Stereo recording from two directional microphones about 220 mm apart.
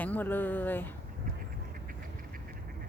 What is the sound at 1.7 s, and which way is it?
Duck, 40° right (ahead or behind).